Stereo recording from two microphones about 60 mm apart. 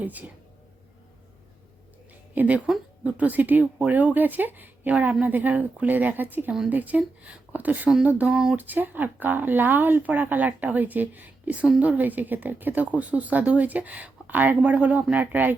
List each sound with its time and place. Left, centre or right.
0.0 s a woman's voice: right
2.3 s a woman's voice: right